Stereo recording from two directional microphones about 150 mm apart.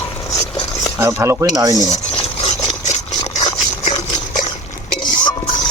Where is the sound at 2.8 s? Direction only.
45° left (ahead or behind).